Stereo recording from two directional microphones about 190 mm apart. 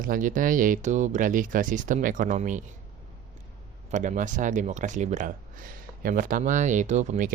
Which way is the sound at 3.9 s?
40° right (ahead or behind).